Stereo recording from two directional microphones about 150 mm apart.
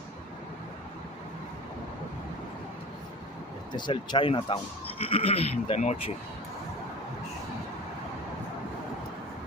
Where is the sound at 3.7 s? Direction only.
30° left (ahead or behind).